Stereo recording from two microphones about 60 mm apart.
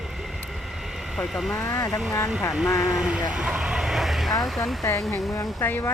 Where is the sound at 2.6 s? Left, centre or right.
Left.